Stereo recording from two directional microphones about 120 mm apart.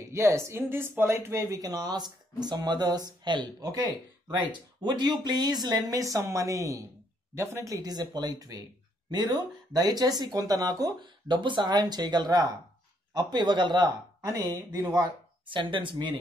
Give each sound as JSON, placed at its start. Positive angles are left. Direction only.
{"t": 0.1, "sound": "speech", "side_deg": -25}